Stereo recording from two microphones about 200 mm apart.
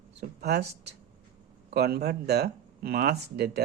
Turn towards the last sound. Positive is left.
turn(degrees=-55)  # may be behind; listen again after turning